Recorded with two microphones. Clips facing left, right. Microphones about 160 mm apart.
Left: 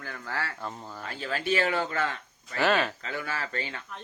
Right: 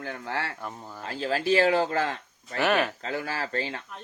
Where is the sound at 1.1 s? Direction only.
30° right (ahead or behind).